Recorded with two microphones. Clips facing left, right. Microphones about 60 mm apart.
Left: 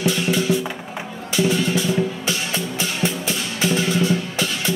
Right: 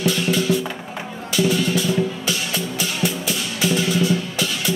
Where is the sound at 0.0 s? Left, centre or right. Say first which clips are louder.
Even; left.